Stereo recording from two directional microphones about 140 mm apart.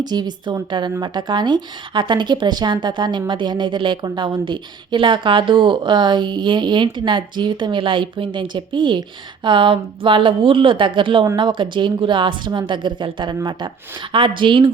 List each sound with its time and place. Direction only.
0.0 s speech: 30° right (ahead or behind)